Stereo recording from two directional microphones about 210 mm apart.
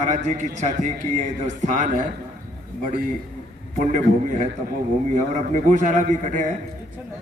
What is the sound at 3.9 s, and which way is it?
A man's voice, 35° right (ahead or behind).